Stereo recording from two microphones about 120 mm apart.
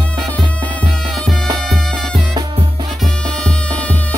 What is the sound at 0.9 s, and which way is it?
Music, 5° left (ahead or behind).